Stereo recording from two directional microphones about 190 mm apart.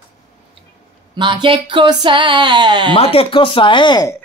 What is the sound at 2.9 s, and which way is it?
Speech, 30° left (ahead or behind).